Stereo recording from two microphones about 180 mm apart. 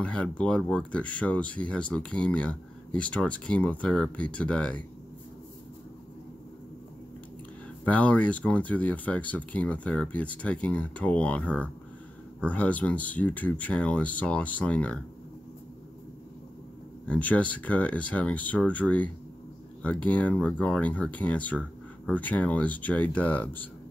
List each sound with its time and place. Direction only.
0.0 s speech: 5° left (ahead or behind)
7.8 s speech: 10° left (ahead or behind)
17.1 s speech: 10° left (ahead or behind)